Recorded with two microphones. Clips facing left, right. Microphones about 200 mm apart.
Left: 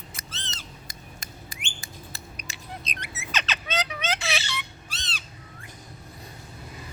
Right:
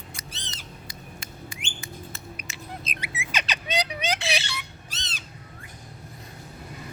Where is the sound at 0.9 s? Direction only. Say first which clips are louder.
Right 3 dB; 40° left (ahead or behind).